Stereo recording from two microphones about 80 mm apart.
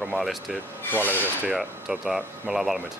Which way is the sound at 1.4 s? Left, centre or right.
Centre.